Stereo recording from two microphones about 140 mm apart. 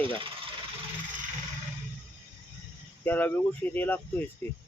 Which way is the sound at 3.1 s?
15° left (ahead or behind).